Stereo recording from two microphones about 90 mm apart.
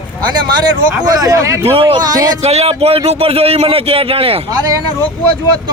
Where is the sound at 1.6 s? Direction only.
90° right.